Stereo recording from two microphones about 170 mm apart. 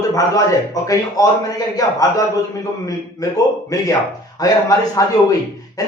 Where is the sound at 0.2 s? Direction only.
20° left (ahead or behind).